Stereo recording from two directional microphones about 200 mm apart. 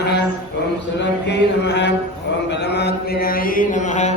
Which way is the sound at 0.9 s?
60° left (ahead or behind).